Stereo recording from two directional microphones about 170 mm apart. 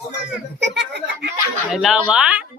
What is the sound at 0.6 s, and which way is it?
Speech, 90° right.